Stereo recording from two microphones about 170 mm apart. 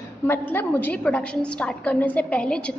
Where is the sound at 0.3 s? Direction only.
10° left (ahead or behind).